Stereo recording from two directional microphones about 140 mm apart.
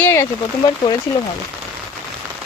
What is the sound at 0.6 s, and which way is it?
Speech, 30° left (ahead or behind).